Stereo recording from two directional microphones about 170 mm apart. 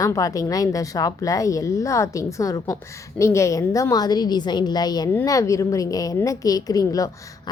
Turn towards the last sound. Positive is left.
turn(degrees=20)  # may be behind; listen again after turning